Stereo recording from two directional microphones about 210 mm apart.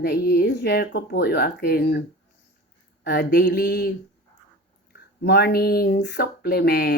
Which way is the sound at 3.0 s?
50° left (ahead or behind).